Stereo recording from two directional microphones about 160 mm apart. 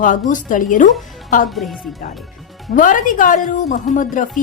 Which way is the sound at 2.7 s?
55° left (ahead or behind).